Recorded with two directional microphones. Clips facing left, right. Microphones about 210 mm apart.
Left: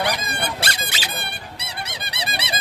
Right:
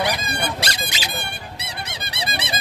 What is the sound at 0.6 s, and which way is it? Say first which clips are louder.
Squeak: right 1 dB; 15° right (ahead or behind).